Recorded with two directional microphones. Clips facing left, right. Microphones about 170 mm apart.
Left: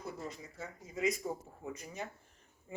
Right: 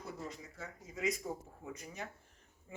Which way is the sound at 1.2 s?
25° left (ahead or behind).